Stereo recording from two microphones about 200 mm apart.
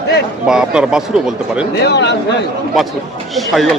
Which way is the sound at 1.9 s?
60° left (ahead or behind).